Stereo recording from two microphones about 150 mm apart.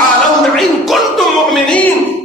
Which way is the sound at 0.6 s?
Centre (ahead or behind).